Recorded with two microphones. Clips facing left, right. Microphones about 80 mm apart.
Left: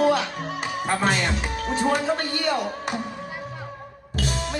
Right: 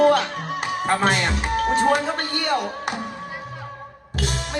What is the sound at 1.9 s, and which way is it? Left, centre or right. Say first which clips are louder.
Speech: right 1 dB; right.